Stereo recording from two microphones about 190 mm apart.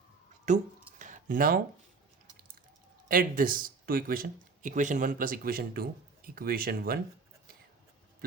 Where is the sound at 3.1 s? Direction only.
50° right (ahead or behind).